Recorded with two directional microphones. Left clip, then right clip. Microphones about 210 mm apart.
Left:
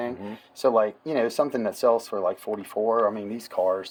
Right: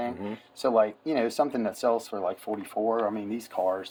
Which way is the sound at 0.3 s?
45° left (ahead or behind).